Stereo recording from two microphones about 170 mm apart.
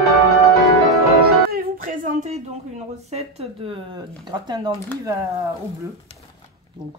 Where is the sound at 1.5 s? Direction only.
55° right (ahead or behind).